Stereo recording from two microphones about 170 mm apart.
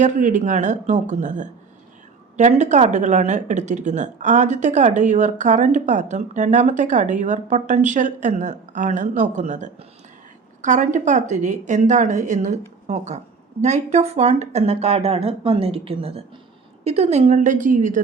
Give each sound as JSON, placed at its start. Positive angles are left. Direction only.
{"t": 0.0, "sound": "speech", "side_deg": -45}